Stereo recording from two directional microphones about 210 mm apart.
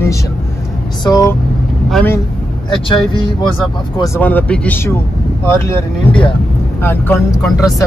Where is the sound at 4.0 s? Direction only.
10° left (ahead or behind).